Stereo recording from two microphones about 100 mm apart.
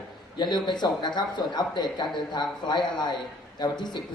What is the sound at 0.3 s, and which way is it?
Speech, 50° left (ahead or behind).